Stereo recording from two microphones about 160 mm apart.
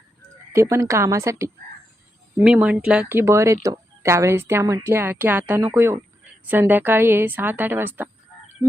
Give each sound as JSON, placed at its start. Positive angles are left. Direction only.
{"t": 0.5, "sound": "a woman's voice", "side_deg": -20}
{"t": 2.4, "sound": "speech", "side_deg": -5}